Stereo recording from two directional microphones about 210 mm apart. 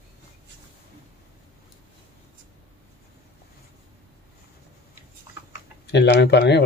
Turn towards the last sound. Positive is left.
turn(degrees=50)  # may be behind; listen again after turning